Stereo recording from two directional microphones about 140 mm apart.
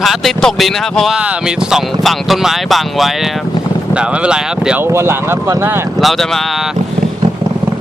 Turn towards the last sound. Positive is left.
turn(degrees=0)  # may be behind; listen again after turning